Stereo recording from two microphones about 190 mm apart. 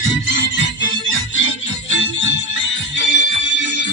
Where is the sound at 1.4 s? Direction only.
80° left.